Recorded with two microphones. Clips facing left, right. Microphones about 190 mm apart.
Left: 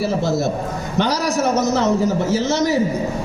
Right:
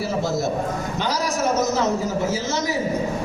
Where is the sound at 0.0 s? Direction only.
65° left (ahead or behind).